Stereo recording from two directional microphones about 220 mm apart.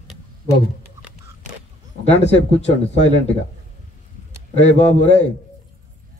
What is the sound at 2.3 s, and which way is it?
A man's voice, 30° left (ahead or behind).